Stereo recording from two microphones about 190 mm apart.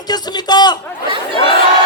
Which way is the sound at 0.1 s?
20° left (ahead or behind).